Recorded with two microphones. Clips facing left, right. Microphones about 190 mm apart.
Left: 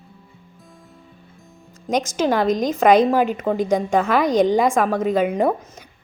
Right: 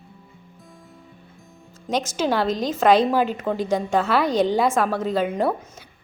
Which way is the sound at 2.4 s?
45° left (ahead or behind).